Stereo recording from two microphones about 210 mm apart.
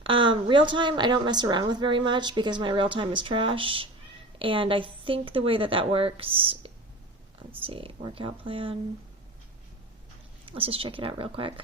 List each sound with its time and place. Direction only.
0.0 s a woman's voice: 25° right (ahead or behind)
10.4 s a woman's voice: 25° right (ahead or behind)